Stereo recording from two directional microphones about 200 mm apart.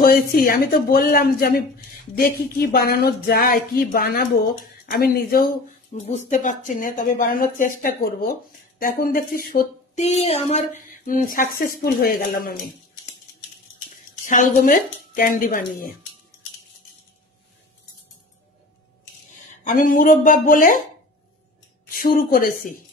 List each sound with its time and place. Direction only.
0.0 s speech: 45° left (ahead or behind)
14.2 s speech: 40° left (ahead or behind)
19.6 s speech: 40° left (ahead or behind)
21.8 s a woman's voice: 45° left (ahead or behind)